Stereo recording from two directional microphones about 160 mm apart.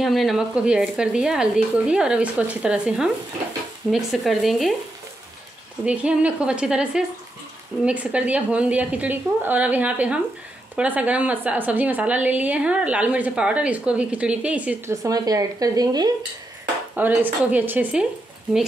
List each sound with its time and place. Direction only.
0.0 s speech: centre (ahead or behind)
5.9 s a woman's voice: 5° right (ahead or behind)
15.0 s speech: 20° right (ahead or behind)
16.9 s a woman's voice: 10° right (ahead or behind)